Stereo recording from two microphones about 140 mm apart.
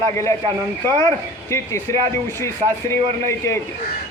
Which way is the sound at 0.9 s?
20° left (ahead or behind).